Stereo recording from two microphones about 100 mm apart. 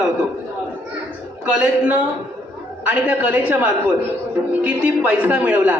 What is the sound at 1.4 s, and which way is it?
A man's voice, 15° right (ahead or behind).